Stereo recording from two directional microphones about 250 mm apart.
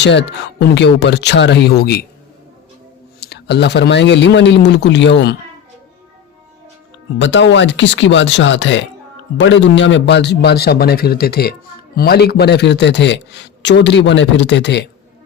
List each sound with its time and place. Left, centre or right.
0.0 s a man's voice: left
3.2 s a man's voice: left
7.2 s a man's voice: left